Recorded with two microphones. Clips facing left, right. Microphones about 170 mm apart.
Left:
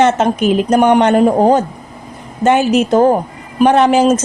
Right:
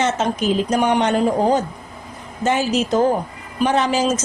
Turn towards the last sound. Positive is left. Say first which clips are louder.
# left 8 dB
turn(degrees=60)  # may be behind; listen again after turning